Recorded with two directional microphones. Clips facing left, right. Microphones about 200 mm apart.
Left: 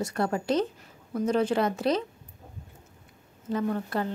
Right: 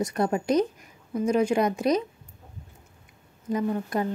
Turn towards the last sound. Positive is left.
turn(degrees=-15)  # may be behind; listen again after turning